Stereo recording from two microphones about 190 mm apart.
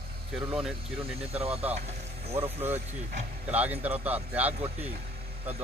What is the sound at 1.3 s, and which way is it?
Speech, 30° right (ahead or behind).